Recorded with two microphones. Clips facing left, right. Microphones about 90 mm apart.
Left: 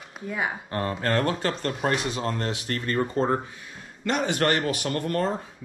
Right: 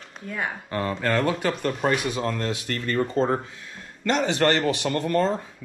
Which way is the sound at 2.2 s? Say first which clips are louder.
Right 1 dB; 20° left (ahead or behind).